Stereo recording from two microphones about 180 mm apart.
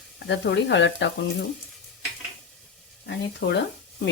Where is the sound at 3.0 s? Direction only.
75° left (ahead or behind).